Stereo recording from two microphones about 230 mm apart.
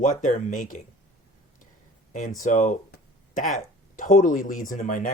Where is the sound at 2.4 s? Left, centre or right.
Left.